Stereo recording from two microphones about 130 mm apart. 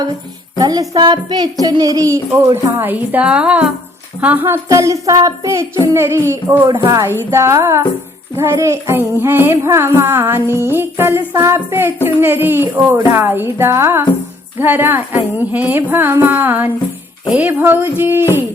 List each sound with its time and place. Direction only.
0.6 s music: 30° right (ahead or behind)
12.0 s speech: 15° right (ahead or behind)